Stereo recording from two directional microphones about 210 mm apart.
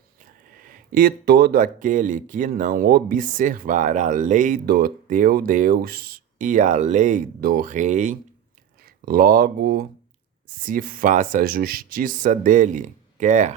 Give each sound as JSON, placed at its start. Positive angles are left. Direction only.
{"t": 0.5, "sound": "speech", "side_deg": -45}